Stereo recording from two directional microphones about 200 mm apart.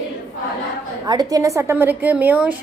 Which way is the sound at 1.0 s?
20° right (ahead or behind).